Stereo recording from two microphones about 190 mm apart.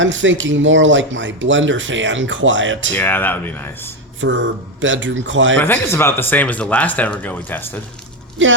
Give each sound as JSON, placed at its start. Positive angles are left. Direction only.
{"t": 0.0, "sound": "speech", "side_deg": -80}
{"t": 2.9, "sound": "speech", "side_deg": 10}
{"t": 4.2, "sound": "speech", "side_deg": -90}
{"t": 5.5, "sound": "speech", "side_deg": 10}
{"t": 8.4, "sound": "speech", "side_deg": -80}